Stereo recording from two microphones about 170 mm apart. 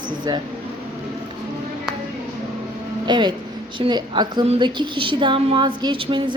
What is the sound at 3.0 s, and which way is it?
A woman's voice, 25° right (ahead or behind).